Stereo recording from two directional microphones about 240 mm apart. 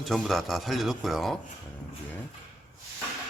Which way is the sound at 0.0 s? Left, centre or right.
Centre.